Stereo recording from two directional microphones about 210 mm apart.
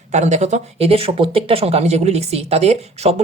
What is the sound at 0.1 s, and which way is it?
A woman's voice, 35° right (ahead or behind).